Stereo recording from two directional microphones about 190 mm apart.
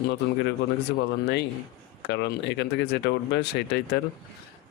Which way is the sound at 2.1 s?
65° left (ahead or behind).